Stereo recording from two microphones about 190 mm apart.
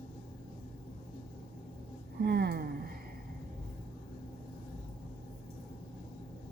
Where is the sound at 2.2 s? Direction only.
55° right (ahead or behind).